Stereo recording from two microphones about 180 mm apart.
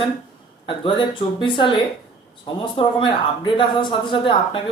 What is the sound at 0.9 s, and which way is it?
Speech, 25° left (ahead or behind).